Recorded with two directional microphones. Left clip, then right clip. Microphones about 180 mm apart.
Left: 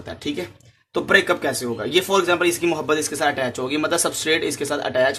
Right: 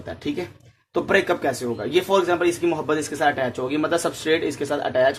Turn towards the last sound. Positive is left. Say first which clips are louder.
# even
turn(degrees=0)  # may be behind; listen again after turning